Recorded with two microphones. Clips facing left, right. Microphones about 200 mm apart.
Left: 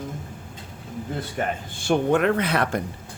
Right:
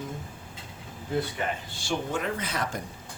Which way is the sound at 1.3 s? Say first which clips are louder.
Left 5 dB; 50° left (ahead or behind).